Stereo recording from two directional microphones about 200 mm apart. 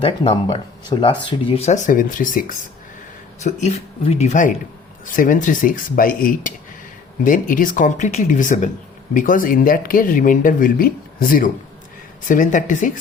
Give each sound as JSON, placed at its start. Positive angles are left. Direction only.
{"t": 0.0, "sound": "speech", "side_deg": 25}